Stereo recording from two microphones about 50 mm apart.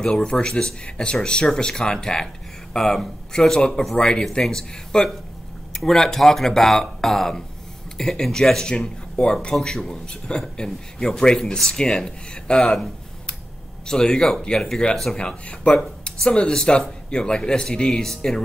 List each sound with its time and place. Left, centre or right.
0.0 s speech: centre